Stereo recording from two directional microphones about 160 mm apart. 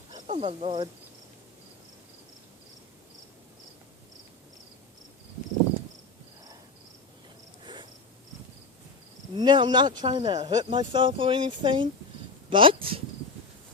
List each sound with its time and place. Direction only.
0.1 s speech: 35° right (ahead or behind)
7.6 s cricket: 30° right (ahead or behind)
9.3 s speech: 30° right (ahead or behind)